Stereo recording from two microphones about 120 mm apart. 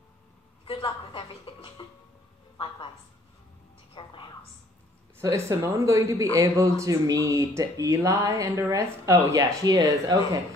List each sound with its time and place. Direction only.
0.7 s a sound: 40° left (ahead or behind)
3.9 s music: 40° left (ahead or behind)
5.2 s speech: 25° right (ahead or behind)